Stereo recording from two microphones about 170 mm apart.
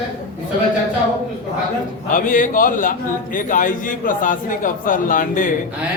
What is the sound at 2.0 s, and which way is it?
A man's voice, 50° left (ahead or behind).